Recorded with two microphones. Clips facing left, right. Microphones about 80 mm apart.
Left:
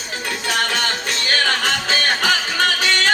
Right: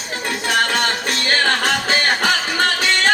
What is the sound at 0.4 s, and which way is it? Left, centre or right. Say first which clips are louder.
Music: right 3 dB; right.